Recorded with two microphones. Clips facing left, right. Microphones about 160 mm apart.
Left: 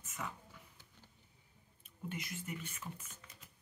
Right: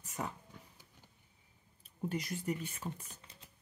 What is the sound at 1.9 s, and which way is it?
Speech, 35° right (ahead or behind).